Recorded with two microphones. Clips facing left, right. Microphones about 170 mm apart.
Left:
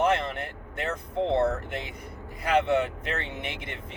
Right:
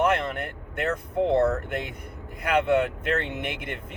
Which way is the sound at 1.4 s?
55° right (ahead or behind).